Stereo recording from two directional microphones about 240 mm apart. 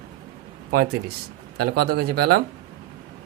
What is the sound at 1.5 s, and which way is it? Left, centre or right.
Speech, right.